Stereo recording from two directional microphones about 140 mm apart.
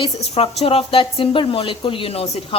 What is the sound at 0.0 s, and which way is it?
Speech, 40° left (ahead or behind).